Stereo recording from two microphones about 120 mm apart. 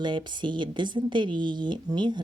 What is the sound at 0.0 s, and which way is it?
A woman's voice, 40° right (ahead or behind).